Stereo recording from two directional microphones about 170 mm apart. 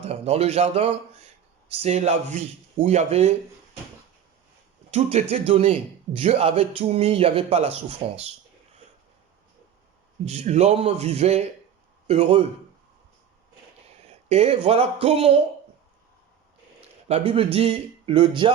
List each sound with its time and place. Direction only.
0.0 s a man's voice: 35° right (ahead or behind)
4.9 s a man's voice: 40° right (ahead or behind)
10.2 s a man's voice: 40° right (ahead or behind)
14.1 s a man's voice: 40° right (ahead or behind)
17.1 s a man's voice: 35° right (ahead or behind)